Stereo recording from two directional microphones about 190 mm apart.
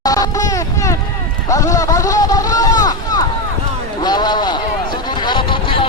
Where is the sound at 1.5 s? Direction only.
15° left (ahead or behind).